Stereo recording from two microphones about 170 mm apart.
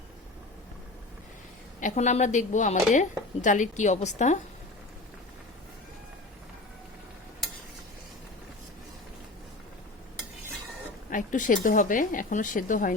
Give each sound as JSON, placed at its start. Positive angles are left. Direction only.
{"t": 1.8, "sound": "speech", "side_deg": 40}
{"t": 11.1, "sound": "speech", "side_deg": 50}